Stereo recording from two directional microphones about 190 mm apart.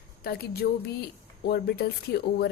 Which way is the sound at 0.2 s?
55° left (ahead or behind).